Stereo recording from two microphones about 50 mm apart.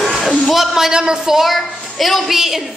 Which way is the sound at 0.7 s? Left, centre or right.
Centre.